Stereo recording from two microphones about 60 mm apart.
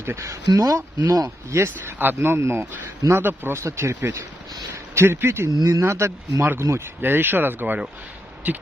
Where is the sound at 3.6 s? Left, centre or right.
Right.